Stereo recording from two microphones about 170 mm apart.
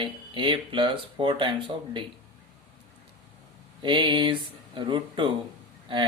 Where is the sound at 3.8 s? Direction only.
30° right (ahead or behind).